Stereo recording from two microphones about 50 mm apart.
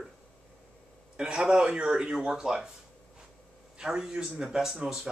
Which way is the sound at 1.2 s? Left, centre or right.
Centre.